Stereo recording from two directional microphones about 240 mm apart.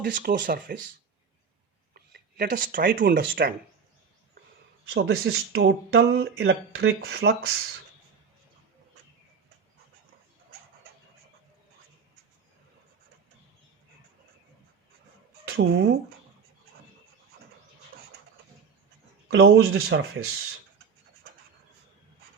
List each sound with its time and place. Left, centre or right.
0.0 s speech: right
1.9 s a sound: right
3.2 s speech: right
4.9 s speech: right
15.4 s speech: right
19.3 s speech: right